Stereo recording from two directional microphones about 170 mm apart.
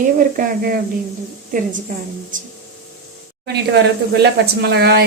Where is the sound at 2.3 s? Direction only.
50° right (ahead or behind).